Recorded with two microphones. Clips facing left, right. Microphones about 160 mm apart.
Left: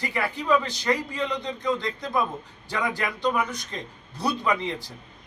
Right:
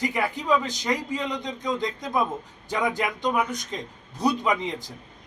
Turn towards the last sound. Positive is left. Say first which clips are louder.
# even
turn(degrees=-15)  # may be behind; listen again after turning